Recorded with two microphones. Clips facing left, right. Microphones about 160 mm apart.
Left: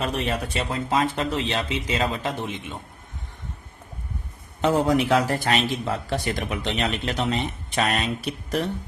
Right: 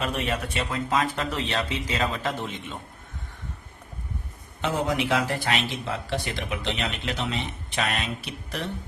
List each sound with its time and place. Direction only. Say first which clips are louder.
0.0 s speech: left 2 dB; 35° left (ahead or behind); by 2.7 s 20° left (ahead or behind)
4.6 s a man's voice: left 6 dB; 40° left (ahead or behind)